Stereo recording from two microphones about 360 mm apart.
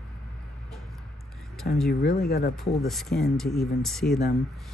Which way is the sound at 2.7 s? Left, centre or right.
Centre.